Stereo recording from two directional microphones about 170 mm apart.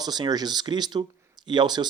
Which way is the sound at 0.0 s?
25° right (ahead or behind).